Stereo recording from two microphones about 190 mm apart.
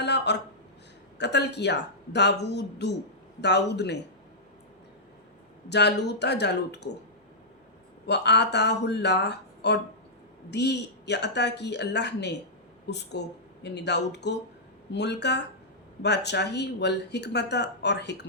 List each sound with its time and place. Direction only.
0.0 s a sound: 65° left (ahead or behind)
1.2 s speech: 65° left (ahead or behind)
5.6 s speech: 65° left (ahead or behind)
8.0 s speech: 65° left (ahead or behind)